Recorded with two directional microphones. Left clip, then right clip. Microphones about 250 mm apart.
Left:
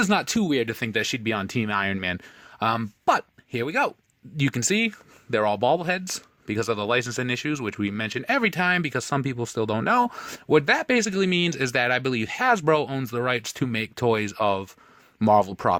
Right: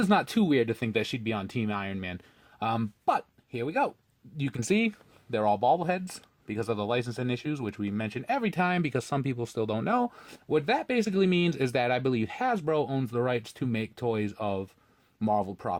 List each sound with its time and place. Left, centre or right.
0.0 s speech: left